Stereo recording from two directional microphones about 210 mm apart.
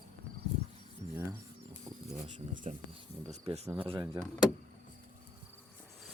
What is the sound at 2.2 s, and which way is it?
Speech, 35° right (ahead or behind).